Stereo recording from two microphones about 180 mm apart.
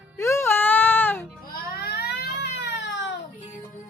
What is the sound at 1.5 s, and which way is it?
Baby cry, 60° left (ahead or behind).